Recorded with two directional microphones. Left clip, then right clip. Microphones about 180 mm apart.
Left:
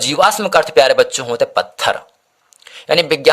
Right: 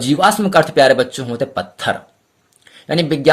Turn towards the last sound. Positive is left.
turn(degrees=35)  # may be behind; listen again after turning